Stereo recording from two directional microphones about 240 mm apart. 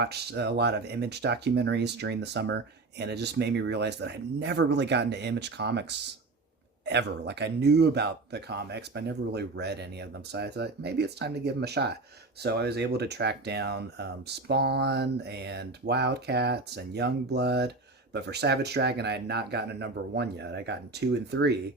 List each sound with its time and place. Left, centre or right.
0.0 s speech: right